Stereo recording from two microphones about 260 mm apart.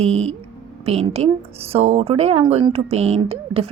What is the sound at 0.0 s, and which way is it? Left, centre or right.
A woman's voice, right.